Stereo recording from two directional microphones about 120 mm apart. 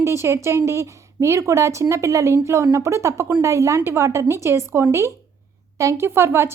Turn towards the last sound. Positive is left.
turn(degrees=-20)  # may be behind; listen again after turning